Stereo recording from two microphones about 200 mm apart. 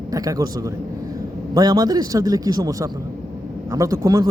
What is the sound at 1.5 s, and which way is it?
Speech, 20° right (ahead or behind).